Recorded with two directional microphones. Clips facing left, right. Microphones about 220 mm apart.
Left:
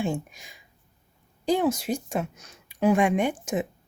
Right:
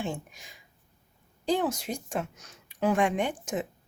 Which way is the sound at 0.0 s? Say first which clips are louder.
Left 6 dB; 10° left (ahead or behind).